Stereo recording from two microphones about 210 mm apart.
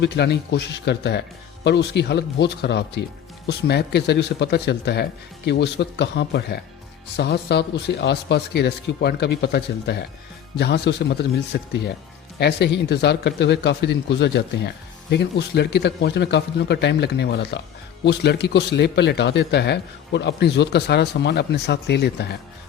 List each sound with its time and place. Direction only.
0.0 s a man's voice: 55° left (ahead or behind)